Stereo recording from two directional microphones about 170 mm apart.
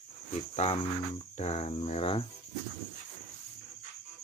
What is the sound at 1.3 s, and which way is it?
Cricket, 40° left (ahead or behind).